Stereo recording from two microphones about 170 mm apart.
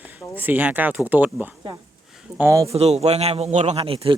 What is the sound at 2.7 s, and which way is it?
Speech, 40° right (ahead or behind).